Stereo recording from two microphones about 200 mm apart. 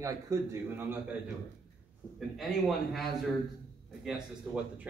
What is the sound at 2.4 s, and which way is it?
A man's voice, centre (ahead or behind).